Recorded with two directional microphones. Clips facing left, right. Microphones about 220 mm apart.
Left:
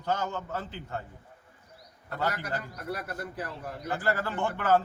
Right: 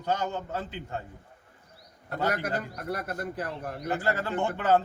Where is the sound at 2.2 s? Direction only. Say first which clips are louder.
Right 3 dB; 20° right (ahead or behind).